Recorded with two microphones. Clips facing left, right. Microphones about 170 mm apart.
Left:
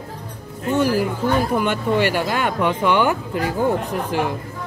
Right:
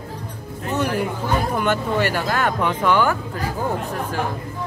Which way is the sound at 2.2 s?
15° left (ahead or behind).